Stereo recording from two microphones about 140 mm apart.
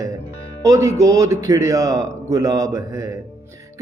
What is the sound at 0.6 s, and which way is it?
Speech, 20° right (ahead or behind).